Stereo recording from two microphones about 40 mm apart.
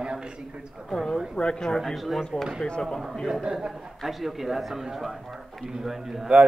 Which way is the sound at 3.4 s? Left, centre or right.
Right.